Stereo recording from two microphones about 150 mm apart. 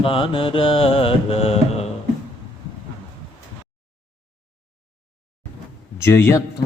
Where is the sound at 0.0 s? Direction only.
35° left (ahead or behind).